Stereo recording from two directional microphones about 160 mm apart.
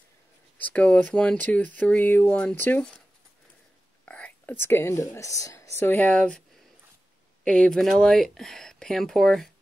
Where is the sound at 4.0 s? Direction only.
10° left (ahead or behind).